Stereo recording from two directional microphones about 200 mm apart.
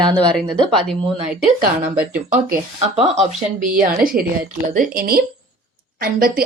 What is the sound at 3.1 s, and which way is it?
A woman's voice, 40° right (ahead or behind).